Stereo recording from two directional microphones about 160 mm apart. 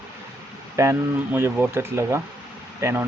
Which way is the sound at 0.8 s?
15° right (ahead or behind).